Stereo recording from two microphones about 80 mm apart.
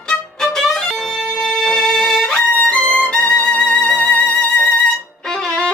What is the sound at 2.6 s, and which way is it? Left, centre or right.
Music, centre.